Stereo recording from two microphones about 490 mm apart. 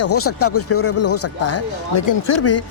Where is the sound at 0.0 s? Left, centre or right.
Left.